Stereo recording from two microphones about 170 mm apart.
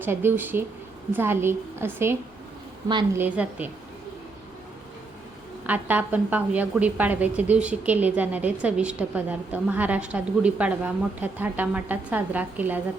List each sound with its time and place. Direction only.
0.0 s a woman's voice: 15° right (ahead or behind)
3.2 s a woman's voice: 10° right (ahead or behind)
5.6 s a woman's voice: 10° right (ahead or behind)